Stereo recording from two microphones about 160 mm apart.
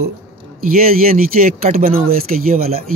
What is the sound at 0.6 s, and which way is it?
Speech, 65° right (ahead or behind).